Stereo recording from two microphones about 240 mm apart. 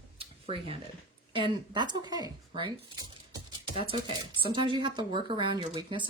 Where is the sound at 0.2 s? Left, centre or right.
Right.